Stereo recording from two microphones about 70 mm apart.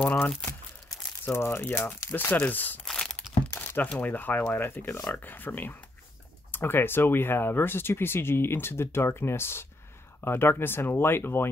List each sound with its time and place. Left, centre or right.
1.2 s speech: left
2.8 s a sound: centre
3.4 s crumpling: left
4.0 s speech: left